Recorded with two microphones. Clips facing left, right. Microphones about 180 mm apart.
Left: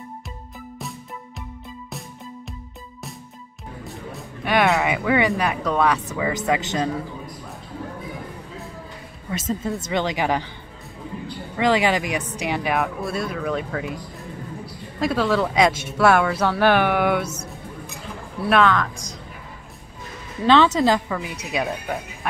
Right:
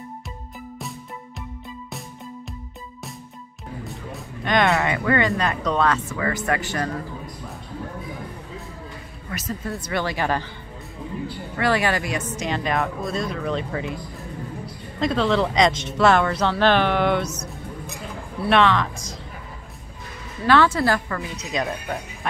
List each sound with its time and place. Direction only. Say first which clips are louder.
3.8 s music: left 3 dB; centre (ahead or behind)
5.4 s speech: left 1 dB; 10° left (ahead or behind)
9.3 s a woman's voice: left 4 dB; 25° left (ahead or behind)
11.5 s speech: left 3 dB; 15° left (ahead or behind)
18.4 s speech: even; centre (ahead or behind)
20.4 s speech: left 2 dB; 20° left (ahead or behind)